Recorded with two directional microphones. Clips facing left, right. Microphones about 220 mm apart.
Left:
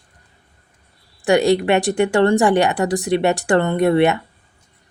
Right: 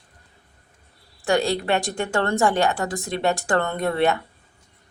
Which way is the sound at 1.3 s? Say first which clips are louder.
Left 6 dB; 15° left (ahead or behind).